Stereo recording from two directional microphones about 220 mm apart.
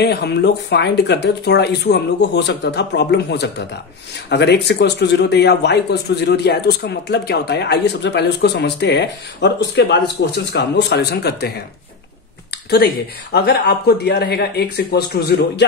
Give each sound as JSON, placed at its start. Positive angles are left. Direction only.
{"t": 0.0, "sound": "speech", "side_deg": 50}
{"t": 12.6, "sound": "speech", "side_deg": 45}